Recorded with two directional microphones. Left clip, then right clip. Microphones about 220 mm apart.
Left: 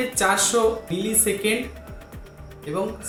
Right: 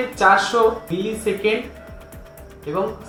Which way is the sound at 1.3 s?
20° left (ahead or behind).